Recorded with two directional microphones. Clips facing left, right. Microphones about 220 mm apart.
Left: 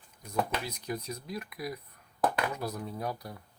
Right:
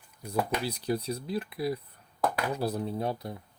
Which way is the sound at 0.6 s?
30° right (ahead or behind).